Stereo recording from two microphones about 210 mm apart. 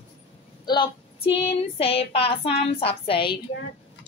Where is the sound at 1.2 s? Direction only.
25° left (ahead or behind).